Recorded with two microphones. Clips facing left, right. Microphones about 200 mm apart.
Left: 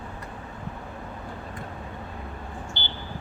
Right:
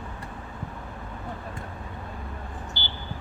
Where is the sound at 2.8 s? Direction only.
20° left (ahead or behind).